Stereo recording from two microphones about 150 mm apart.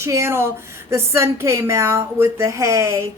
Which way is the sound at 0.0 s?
15° right (ahead or behind).